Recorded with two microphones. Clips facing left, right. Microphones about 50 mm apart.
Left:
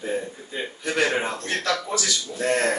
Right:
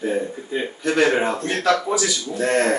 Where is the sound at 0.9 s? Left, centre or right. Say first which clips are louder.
Right 5 dB; centre.